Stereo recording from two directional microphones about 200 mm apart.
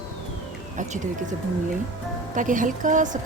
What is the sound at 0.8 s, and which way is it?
A woman's voice, 40° right (ahead or behind).